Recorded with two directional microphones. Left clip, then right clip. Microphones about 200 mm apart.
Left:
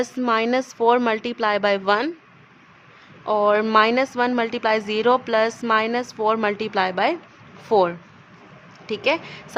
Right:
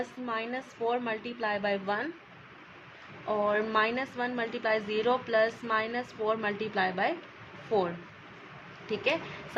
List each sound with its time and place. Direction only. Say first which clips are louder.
0.3 s a woman's voice: left 15 dB; 45° left (ahead or behind)
3.2 s a woman's voice: left 10 dB; 45° left (ahead or behind)